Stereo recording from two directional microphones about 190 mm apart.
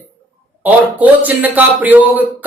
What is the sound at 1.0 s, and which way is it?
Speech, 10° right (ahead or behind).